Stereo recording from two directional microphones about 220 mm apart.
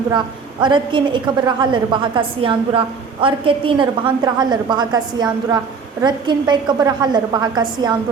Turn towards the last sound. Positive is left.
turn(degrees=-20)  # may be behind; listen again after turning